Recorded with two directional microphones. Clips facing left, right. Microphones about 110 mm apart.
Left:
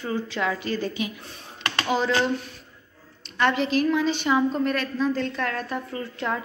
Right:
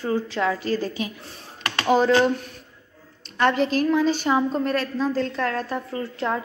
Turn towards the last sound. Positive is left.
turn(degrees=-30)  # may be behind; listen again after turning